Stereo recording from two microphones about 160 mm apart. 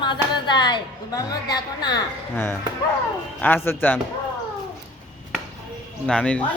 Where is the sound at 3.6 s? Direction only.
10° left (ahead or behind).